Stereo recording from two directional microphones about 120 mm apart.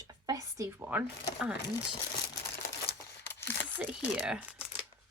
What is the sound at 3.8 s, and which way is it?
Speech, 10° right (ahead or behind).